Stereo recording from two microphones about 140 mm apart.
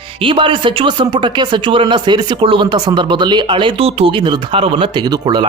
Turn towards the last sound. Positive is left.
turn(degrees=-30)  # may be behind; listen again after turning